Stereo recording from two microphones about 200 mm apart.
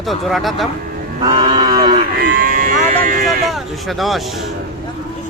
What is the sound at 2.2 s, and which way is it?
Livestock, 45° right (ahead or behind).